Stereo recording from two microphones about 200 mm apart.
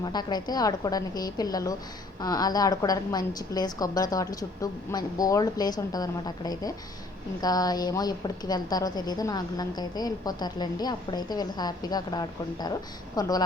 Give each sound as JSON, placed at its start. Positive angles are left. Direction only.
{"t": 0.0, "sound": "a woman's voice", "side_deg": 20}